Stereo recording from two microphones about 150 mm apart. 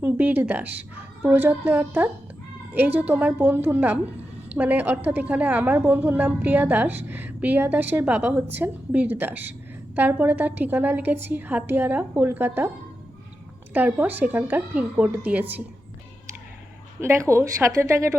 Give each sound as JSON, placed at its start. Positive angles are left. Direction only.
{"t": 0.0, "sound": "a woman's voice", "side_deg": -10}
{"t": 13.7, "sound": "a woman's voice", "side_deg": -10}
{"t": 17.0, "sound": "a woman's voice", "side_deg": -20}